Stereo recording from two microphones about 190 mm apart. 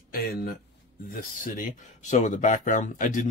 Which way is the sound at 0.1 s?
50° left (ahead or behind).